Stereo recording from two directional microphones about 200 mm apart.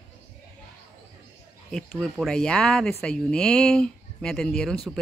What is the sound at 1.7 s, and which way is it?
Speech, 5° left (ahead or behind).